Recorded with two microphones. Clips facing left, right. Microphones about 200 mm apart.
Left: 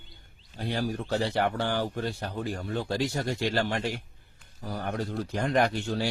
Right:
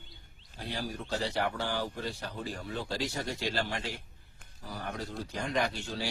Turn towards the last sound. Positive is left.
turn(degrees=60)  # may be behind; listen again after turning